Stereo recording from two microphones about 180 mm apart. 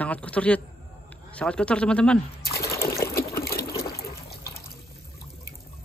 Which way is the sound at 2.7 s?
15° left (ahead or behind).